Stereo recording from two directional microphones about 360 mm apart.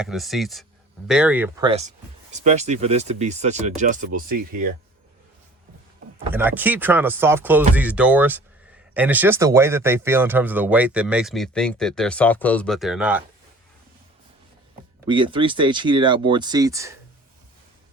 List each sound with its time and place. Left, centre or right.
0.0 s speech: centre; by 4.7 s right
6.3 s speech: centre
15.0 s speech: centre